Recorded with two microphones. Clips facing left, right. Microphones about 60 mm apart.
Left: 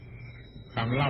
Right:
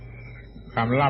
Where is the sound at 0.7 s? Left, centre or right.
Right.